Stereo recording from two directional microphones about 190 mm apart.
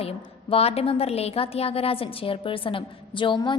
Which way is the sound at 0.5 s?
30° left (ahead or behind).